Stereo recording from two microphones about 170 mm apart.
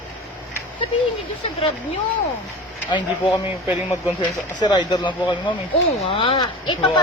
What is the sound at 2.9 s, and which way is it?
Speech, 25° left (ahead or behind).